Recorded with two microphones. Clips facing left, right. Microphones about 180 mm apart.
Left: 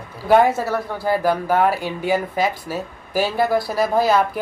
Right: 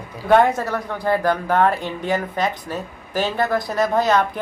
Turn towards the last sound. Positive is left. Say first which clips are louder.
# left 1 dB
turn(degrees=5)  # may be behind; listen again after turning